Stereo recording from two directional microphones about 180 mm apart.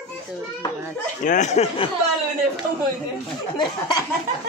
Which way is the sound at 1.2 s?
40° left (ahead or behind).